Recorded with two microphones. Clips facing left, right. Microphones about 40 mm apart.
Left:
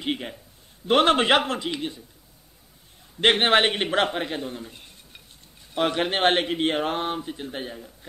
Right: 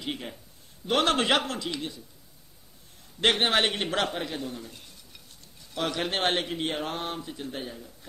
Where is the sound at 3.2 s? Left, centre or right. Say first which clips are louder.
Left 5 dB; left.